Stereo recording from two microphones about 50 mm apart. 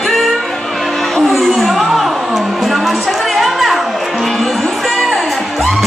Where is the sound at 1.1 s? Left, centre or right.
Centre.